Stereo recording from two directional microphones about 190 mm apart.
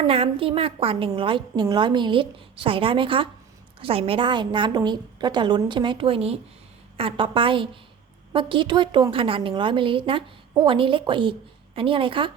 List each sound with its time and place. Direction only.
0.1 s a woman's voice: 30° right (ahead or behind)